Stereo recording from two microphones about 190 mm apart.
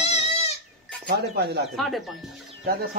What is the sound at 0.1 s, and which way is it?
Goat, 35° left (ahead or behind).